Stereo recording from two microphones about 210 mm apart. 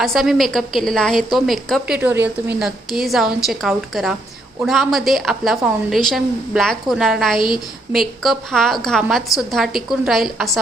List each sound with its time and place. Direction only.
0.0 s a woman's voice: centre (ahead or behind)
2.1 s a woman's voice: 50° right (ahead or behind)
2.6 s a woman's voice: centre (ahead or behind)